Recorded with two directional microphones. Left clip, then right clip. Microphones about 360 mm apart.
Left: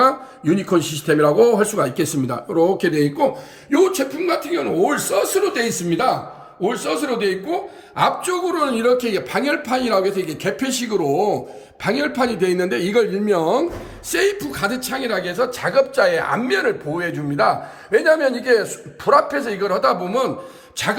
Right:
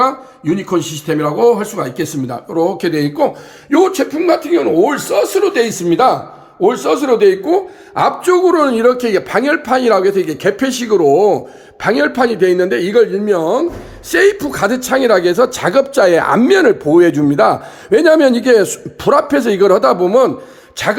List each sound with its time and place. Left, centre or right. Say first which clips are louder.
0.0 s a man's voice: right 2 dB; centre